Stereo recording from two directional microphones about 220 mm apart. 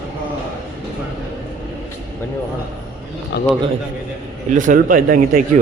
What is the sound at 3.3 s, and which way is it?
Speech, 50° left (ahead or behind).